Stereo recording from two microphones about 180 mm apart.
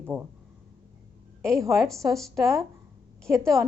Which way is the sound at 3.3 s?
15° right (ahead or behind).